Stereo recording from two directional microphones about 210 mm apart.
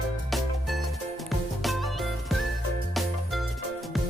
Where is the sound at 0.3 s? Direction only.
Centre (ahead or behind).